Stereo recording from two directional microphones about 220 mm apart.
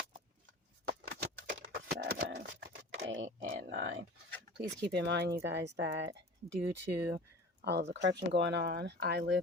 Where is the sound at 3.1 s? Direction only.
60° right (ahead or behind).